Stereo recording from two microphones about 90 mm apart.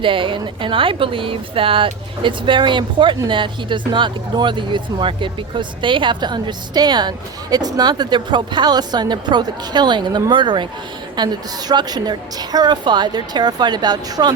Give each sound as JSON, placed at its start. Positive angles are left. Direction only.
{"t": 0.0, "sound": "a woman's voice", "side_deg": -70}